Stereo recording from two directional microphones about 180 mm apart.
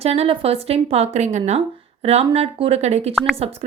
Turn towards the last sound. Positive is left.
turn(degrees=-35)  # may be behind; listen again after turning